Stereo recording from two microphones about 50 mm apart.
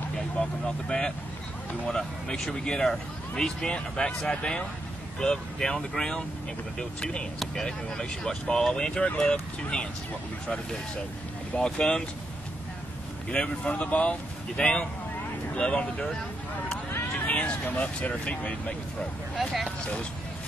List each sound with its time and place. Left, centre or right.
0.4 s speech: left
0.8 s speech: centre
11.5 s speech: centre
13.3 s speech: left
17.3 s a sound: left
17.6 s speech: left